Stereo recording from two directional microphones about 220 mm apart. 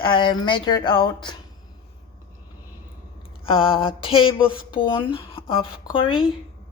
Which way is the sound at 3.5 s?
25° left (ahead or behind).